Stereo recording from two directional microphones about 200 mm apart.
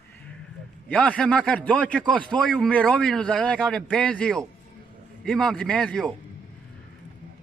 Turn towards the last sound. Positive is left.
turn(degrees=5)  # may be behind; listen again after turning